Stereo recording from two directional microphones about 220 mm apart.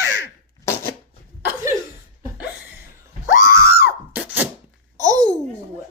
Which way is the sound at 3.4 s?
40° left (ahead or behind).